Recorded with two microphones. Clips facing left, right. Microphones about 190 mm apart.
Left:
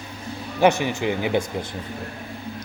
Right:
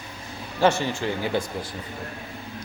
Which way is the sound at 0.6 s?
15° left (ahead or behind).